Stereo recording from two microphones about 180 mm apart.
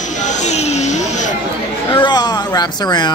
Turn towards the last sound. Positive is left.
turn(degrees=25)  # may be behind; listen again after turning